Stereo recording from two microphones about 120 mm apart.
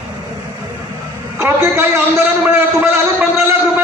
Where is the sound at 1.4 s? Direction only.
20° right (ahead or behind).